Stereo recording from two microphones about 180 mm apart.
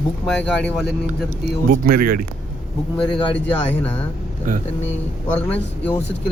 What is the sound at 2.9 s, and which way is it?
Speech, 5° left (ahead or behind).